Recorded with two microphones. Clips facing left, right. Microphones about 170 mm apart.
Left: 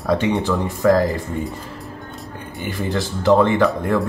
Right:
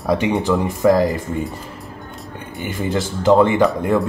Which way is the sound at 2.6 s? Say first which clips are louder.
Right 2 dB; 20° right (ahead or behind).